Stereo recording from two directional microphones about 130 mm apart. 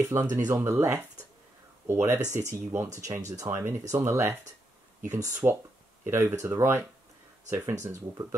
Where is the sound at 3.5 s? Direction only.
15° right (ahead or behind).